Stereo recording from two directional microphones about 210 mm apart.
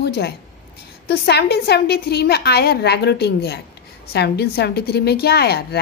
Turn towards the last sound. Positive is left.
turn(degrees=50)  # may be behind; listen again after turning